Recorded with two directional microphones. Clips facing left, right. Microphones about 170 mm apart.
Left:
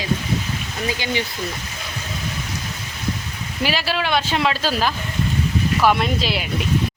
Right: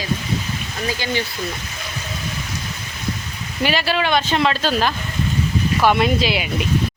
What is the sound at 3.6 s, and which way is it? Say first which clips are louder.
Speech: right 3 dB; centre (ahead or behind).